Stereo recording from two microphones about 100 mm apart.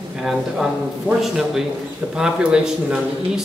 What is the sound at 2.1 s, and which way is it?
Speech, 5° right (ahead or behind).